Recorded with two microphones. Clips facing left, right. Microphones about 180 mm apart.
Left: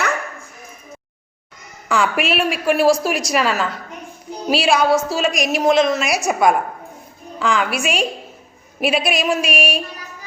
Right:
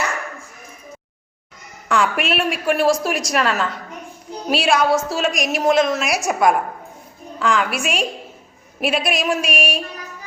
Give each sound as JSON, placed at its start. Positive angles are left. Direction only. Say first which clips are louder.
{"t": 1.9, "sound": "a woman's voice", "louder": "left 1 dB", "side_deg": 0}